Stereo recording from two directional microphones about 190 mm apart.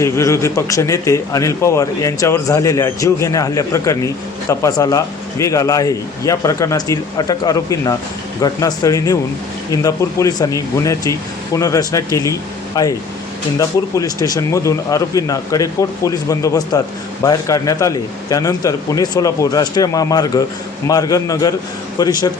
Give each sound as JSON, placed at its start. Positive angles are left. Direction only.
{"t": 0.0, "sound": "a man's voice", "side_deg": 15}